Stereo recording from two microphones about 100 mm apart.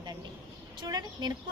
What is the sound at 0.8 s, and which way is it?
Speech, 45° right (ahead or behind).